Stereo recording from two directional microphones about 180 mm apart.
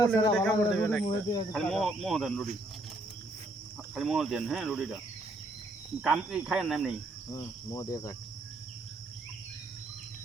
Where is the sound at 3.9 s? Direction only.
Centre (ahead or behind).